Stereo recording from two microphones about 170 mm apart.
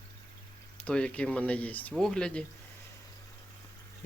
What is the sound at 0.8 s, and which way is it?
Speech, 5° left (ahead or behind).